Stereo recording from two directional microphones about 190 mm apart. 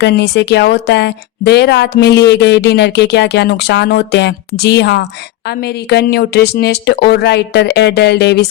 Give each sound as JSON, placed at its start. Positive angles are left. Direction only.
{"t": 0.0, "sound": "speech", "side_deg": 60}